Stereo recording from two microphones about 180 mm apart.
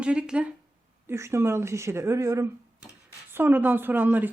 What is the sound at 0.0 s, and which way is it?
A woman's voice, 5° right (ahead or behind).